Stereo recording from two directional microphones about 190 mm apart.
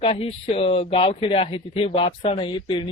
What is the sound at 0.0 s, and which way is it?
A man's voice, 30° left (ahead or behind).